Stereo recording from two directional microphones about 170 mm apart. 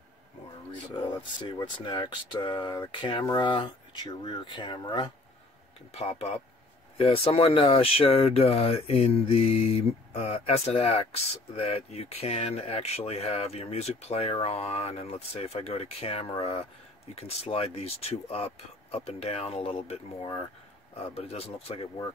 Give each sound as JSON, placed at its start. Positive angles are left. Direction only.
{"t": 0.9, "sound": "speech", "side_deg": 25}
{"t": 5.9, "sound": "speech", "side_deg": 35}